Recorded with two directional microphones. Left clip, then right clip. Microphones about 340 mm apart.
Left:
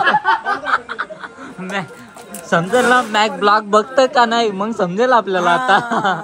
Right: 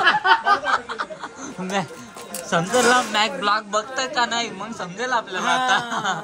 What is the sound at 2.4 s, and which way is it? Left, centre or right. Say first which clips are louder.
A man's voice: left 4 dB; centre.